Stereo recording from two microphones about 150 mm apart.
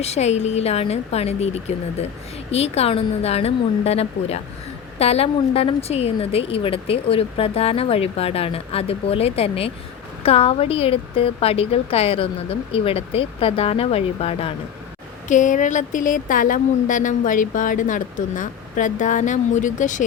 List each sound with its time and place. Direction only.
0.0 s a woman's voice: 45° left (ahead or behind)
15.3 s speech: 55° left (ahead or behind)